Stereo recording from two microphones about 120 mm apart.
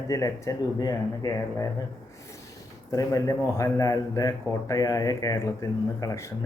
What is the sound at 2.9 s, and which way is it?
A man's voice, 30° left (ahead or behind).